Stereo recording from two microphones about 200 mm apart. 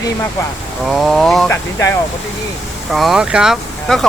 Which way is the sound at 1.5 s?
15° left (ahead or behind).